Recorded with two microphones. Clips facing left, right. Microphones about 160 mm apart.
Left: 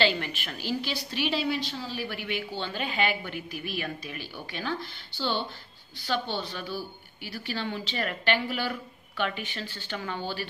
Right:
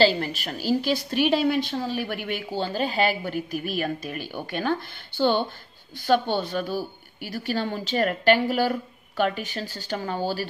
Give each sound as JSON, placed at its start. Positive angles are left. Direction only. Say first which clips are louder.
{"t": 0.0, "sound": "a woman's voice", "louder": "right 6 dB", "side_deg": -35}